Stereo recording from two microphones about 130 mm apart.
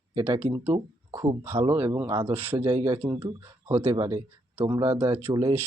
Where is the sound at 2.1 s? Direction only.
20° right (ahead or behind).